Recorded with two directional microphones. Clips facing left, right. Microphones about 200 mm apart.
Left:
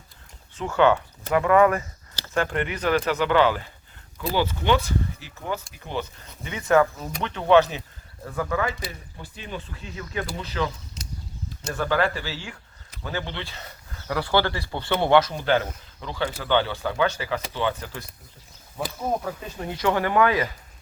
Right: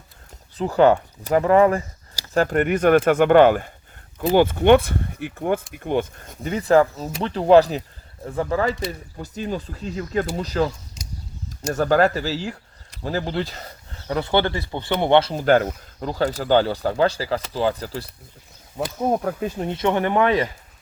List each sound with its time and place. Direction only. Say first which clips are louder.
0.5 s speech: right 4 dB; 35° right (ahead or behind)
11.7 s speech: right 6 dB; 40° right (ahead or behind); by 15.4 s 25° right (ahead or behind)
15.4 s speech: right 6 dB; 45° right (ahead or behind)
18.9 s speech: right 6 dB; 50° right (ahead or behind)
19.5 s speech: even; 25° right (ahead or behind)